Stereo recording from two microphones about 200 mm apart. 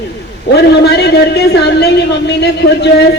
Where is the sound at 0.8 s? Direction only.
55° left (ahead or behind).